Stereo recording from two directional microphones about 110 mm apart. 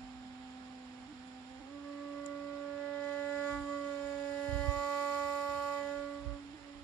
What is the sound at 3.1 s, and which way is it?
Shofar, 15° left (ahead or behind).